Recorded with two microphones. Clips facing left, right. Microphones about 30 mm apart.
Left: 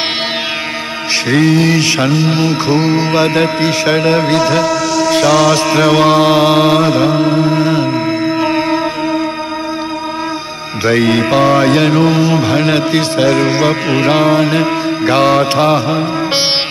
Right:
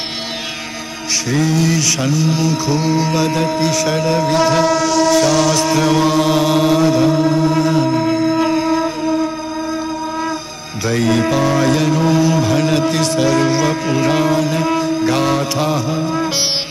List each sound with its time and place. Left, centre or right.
1.3 s music: left
4.6 s vehicle: centre
5.2 s mantra: centre
5.6 s chant: left
10.9 s music: left